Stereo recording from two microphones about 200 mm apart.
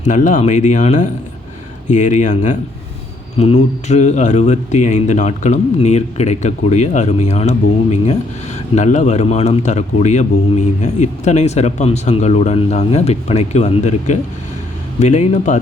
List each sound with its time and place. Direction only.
0.0 s speech: 40° left (ahead or behind)